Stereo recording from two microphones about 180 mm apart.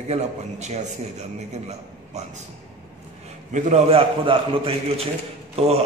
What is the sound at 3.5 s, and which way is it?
A man's voice, 40° right (ahead or behind).